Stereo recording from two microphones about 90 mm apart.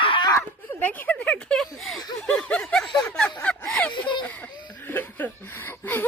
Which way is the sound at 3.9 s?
55° left (ahead or behind).